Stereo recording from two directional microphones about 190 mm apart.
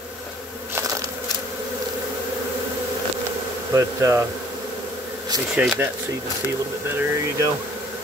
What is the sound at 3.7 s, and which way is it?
Speech, 15° right (ahead or behind).